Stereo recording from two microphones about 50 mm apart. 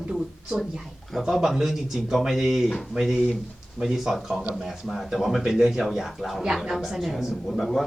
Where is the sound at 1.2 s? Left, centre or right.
Centre.